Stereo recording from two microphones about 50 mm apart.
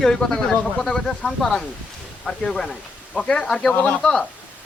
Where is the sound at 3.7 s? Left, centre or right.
Left.